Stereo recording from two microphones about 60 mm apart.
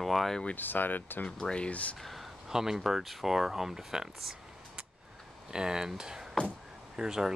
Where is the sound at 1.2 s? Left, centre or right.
Centre.